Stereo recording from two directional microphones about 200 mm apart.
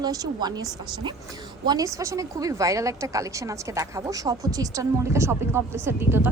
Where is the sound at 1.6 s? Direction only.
15° right (ahead or behind).